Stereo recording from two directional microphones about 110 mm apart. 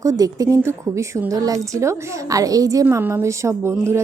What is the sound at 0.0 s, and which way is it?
A woman's voice, 30° right (ahead or behind).